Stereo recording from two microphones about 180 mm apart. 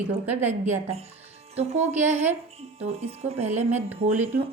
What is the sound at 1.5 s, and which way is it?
Speech, 35° right (ahead or behind).